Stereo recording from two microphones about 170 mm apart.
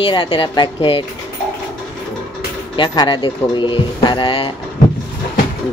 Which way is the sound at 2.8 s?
25° left (ahead or behind).